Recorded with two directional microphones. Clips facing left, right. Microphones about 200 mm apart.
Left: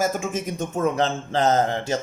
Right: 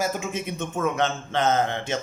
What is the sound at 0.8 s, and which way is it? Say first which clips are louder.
Music: left 2 dB; 35° left (ahead or behind).